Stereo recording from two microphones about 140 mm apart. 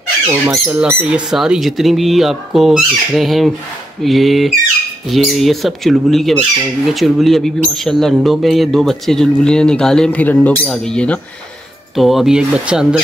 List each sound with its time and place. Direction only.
0.3 s a man's voice: 15° right (ahead or behind)